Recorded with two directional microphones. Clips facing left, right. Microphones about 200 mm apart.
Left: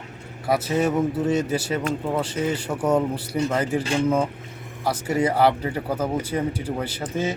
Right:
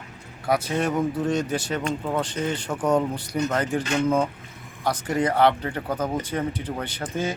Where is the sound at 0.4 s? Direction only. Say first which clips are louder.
Left 2 dB; 5° left (ahead or behind).